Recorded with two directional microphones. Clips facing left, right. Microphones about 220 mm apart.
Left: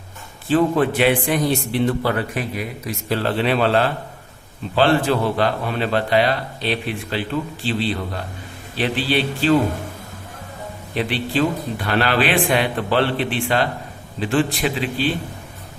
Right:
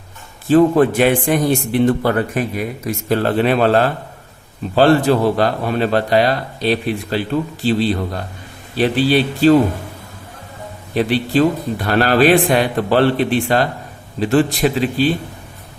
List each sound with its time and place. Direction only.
0.4 s a man's voice: 45° right (ahead or behind)
10.9 s a man's voice: 40° right (ahead or behind)